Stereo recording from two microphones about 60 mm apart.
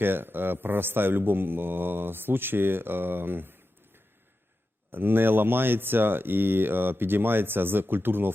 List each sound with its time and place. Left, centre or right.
0.0 s speech: right